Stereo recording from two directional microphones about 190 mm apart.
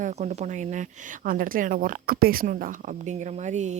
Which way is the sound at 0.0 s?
35° right (ahead or behind).